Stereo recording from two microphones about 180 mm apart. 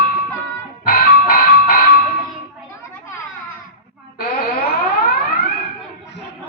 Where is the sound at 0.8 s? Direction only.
55° left (ahead or behind).